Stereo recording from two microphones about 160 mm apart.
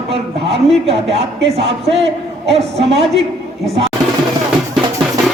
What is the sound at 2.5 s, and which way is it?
Speech, 40° right (ahead or behind).